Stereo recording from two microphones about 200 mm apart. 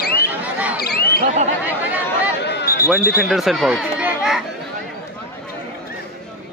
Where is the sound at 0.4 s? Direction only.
5° right (ahead or behind).